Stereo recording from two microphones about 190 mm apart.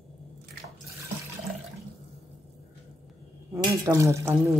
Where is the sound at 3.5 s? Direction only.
15° right (ahead or behind).